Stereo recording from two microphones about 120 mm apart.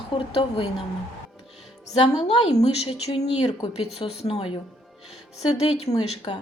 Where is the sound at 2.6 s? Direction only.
60° left (ahead or behind).